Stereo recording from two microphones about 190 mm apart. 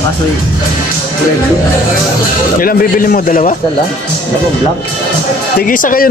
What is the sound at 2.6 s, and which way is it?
Speech, 45° left (ahead or behind).